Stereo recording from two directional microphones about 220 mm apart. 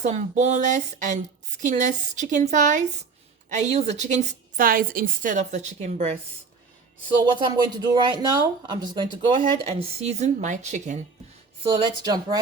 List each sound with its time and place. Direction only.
0.0 s speech: 30° right (ahead or behind)
7.3 s speech: 20° right (ahead or behind)
11.6 s speech: 20° right (ahead or behind)